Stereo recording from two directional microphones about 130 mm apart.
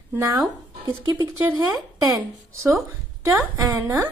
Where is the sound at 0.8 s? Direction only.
35° right (ahead or behind).